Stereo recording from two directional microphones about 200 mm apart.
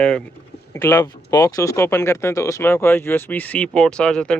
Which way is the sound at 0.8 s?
15° left (ahead or behind).